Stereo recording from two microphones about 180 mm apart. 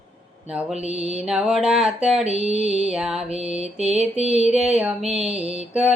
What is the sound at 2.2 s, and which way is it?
Music, 35° right (ahead or behind).